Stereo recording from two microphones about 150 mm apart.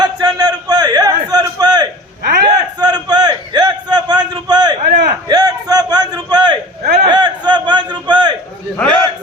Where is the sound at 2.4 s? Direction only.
25° right (ahead or behind).